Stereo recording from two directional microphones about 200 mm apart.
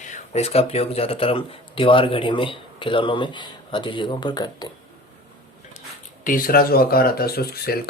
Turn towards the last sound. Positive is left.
turn(degrees=50)  # may be behind; listen again after turning